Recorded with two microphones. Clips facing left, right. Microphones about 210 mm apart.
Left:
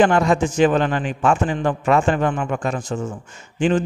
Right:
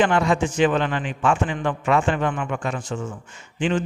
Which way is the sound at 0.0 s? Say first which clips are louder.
Left 3 dB; 45° left (ahead or behind).